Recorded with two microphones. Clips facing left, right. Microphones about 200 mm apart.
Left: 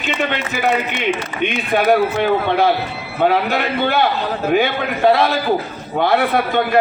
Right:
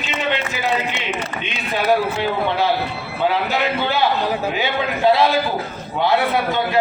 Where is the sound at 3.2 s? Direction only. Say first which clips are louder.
Left 4 dB; 55° left (ahead or behind).